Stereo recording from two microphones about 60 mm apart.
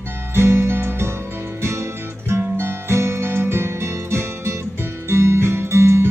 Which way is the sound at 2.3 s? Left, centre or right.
Right.